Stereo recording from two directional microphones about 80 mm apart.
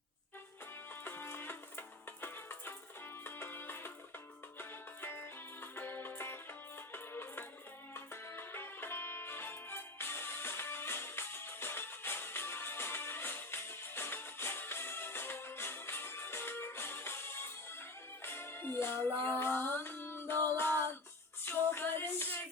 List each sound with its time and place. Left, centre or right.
1.0 s music: left